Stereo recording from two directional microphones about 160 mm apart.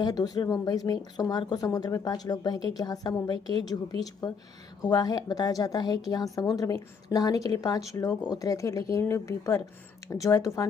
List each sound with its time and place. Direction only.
0.0 s a woman's voice: 25° left (ahead or behind)